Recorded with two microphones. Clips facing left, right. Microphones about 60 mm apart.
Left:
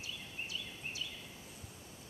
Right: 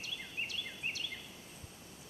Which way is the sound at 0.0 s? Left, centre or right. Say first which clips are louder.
Right 3 dB; right.